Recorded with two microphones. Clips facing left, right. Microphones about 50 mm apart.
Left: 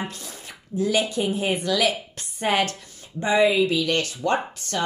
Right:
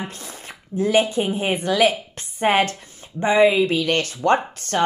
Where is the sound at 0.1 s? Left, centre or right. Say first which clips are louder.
Right 2 dB; right.